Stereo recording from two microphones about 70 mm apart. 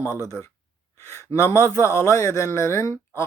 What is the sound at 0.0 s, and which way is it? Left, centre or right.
Speech, right.